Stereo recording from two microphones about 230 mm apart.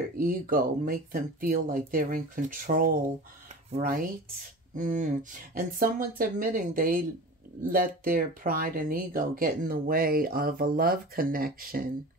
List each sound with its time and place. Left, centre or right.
0.2 s speech: right